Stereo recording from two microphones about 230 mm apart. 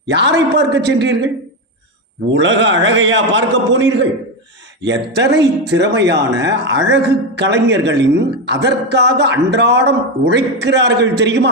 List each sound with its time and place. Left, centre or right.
0.1 s a woman's voice: right
2.3 s a woman's voice: right